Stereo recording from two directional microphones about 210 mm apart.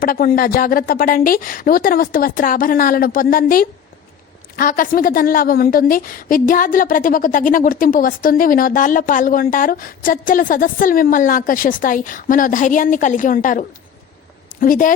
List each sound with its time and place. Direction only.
0.0 s a woman's voice: 45° left (ahead or behind)